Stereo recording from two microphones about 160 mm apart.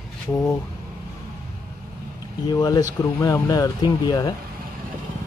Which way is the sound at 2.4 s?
25° left (ahead or behind).